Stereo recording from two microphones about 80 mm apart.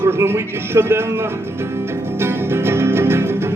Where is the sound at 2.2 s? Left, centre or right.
Right.